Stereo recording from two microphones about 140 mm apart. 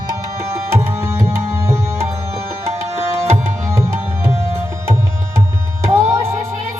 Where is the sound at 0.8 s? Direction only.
20° right (ahead or behind).